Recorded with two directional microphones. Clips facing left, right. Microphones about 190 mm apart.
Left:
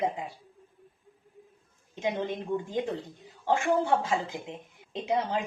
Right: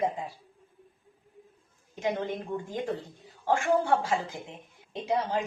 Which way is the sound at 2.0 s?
20° left (ahead or behind).